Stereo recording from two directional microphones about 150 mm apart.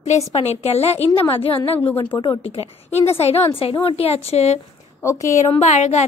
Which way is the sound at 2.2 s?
40° left (ahead or behind).